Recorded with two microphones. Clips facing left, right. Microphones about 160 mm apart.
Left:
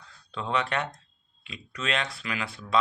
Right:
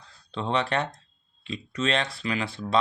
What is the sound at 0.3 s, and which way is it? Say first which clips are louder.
Speech: right 2 dB; 30° right (ahead or behind).